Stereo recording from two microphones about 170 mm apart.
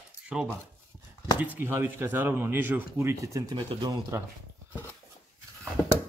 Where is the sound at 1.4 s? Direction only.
10° right (ahead or behind).